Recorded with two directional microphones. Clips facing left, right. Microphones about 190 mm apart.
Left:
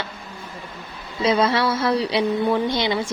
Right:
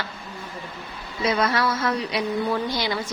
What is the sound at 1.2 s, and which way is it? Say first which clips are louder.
A woman's voice: left 3 dB; 30° left (ahead or behind).